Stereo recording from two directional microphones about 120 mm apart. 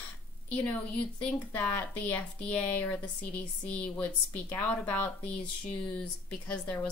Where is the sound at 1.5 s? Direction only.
15° left (ahead or behind).